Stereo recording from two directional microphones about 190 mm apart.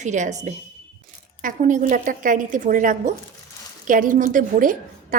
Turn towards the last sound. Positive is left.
turn(degrees=-45)  # may be behind; listen again after turning